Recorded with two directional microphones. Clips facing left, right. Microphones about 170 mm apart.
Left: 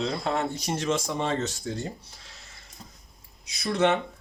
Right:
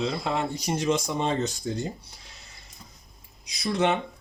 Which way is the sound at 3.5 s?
15° right (ahead or behind).